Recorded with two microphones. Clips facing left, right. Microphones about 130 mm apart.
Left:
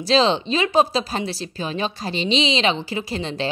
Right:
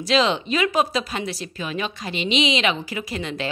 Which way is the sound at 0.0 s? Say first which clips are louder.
Left 2 dB; 30° left (ahead or behind).